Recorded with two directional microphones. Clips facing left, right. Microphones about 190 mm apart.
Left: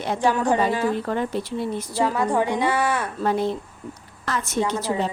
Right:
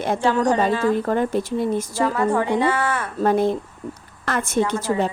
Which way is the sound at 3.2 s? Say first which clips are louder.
Right 7 dB; 50° right (ahead or behind).